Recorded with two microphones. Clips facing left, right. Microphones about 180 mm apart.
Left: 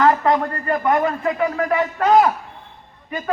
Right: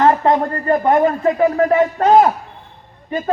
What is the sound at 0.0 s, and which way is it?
A man's voice, 25° right (ahead or behind).